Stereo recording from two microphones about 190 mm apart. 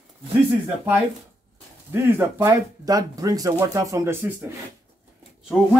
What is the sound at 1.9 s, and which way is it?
Speech, 15° right (ahead or behind).